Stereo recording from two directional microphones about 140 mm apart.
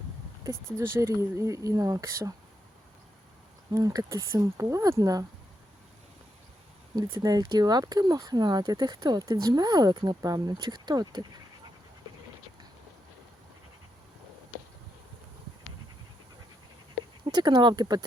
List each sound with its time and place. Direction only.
0.4 s speech: 20° right (ahead or behind)
3.7 s speech: 25° right (ahead or behind)
6.9 s speech: 25° right (ahead or behind)
17.2 s speech: 30° right (ahead or behind)